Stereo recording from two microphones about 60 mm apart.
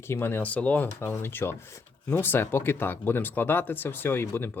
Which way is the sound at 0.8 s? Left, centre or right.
Left.